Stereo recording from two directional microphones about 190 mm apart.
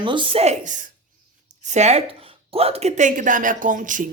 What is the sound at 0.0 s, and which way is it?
A woman's voice, 25° right (ahead or behind).